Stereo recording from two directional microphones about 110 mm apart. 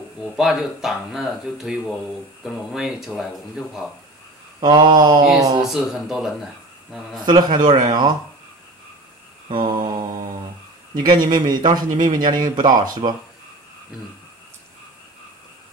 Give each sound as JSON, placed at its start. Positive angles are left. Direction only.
{"t": 0.4, "sound": "a man's voice", "side_deg": -5}
{"t": 4.6, "sound": "speech", "side_deg": -45}
{"t": 5.6, "sound": "a man's voice", "side_deg": -5}
{"t": 7.2, "sound": "speech", "side_deg": -40}
{"t": 9.5, "sound": "mantra", "side_deg": -50}
{"t": 11.0, "sound": "speech", "side_deg": -40}